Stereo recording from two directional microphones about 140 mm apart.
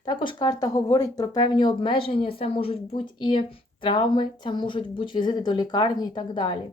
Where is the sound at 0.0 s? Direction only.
35° left (ahead or behind).